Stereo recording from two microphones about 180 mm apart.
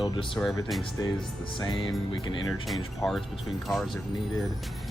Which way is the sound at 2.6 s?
Centre (ahead or behind).